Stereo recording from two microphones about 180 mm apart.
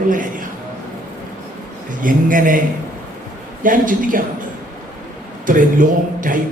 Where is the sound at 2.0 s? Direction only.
50° right (ahead or behind).